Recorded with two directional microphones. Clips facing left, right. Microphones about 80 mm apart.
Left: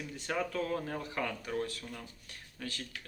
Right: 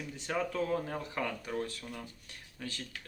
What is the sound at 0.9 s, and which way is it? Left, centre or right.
Speech, centre.